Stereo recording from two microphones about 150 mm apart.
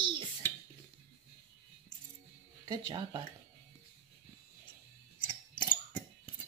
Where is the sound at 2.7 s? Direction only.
30° right (ahead or behind).